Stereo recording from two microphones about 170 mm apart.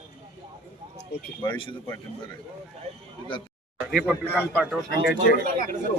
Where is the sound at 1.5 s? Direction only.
30° left (ahead or behind).